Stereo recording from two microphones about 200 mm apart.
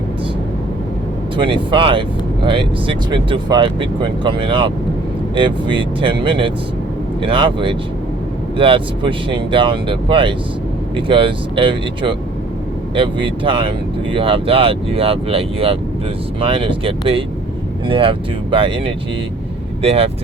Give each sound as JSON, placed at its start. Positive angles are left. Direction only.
{"t": 1.4, "sound": "speech", "side_deg": -25}